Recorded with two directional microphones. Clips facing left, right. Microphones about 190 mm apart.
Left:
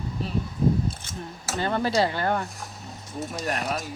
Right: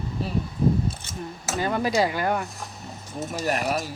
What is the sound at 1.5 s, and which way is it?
Speech, 10° right (ahead or behind).